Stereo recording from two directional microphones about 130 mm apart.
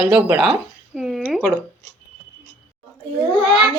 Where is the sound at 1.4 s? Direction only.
15° left (ahead or behind).